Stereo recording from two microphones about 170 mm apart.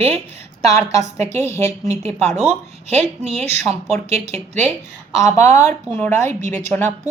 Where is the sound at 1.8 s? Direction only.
40° right (ahead or behind).